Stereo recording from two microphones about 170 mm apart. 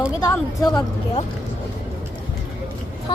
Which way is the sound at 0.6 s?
25° left (ahead or behind).